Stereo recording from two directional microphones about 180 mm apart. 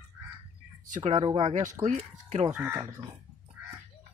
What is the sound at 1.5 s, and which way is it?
Speech, 45° right (ahead or behind).